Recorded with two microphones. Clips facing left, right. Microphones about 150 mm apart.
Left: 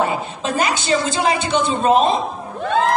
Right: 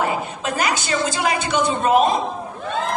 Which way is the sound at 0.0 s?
25° left (ahead or behind).